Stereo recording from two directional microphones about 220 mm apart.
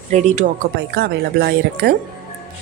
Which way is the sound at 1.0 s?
45° right (ahead or behind).